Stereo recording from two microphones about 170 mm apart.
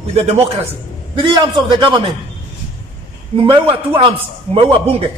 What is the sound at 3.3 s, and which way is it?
Speech, 30° right (ahead or behind).